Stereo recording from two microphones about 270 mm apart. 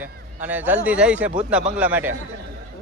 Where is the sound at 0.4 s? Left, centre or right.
Centre.